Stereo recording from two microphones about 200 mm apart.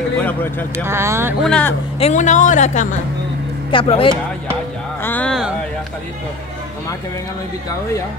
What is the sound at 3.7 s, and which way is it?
Speech, 25° left (ahead or behind).